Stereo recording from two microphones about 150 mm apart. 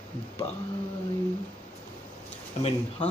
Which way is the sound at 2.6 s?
50° left (ahead or behind).